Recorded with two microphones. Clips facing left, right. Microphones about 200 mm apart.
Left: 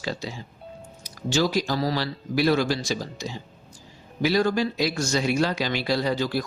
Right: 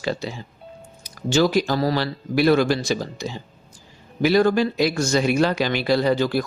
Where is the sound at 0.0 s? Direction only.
60° right (ahead or behind).